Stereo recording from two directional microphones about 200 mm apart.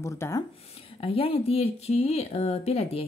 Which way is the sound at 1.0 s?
30° left (ahead or behind).